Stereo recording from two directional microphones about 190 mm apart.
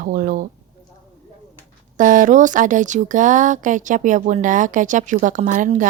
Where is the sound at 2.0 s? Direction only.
45° right (ahead or behind).